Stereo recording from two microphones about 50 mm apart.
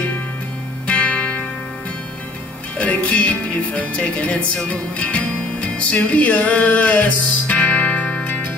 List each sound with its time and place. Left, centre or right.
0.8 s music: left
2.8 s music: left